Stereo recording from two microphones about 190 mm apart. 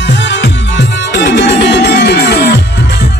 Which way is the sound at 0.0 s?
70° left (ahead or behind).